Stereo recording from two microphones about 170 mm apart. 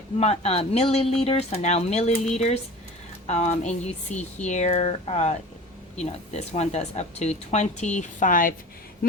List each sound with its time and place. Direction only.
0.2 s speech: 40° left (ahead or behind); by 8.5 s 55° left (ahead or behind)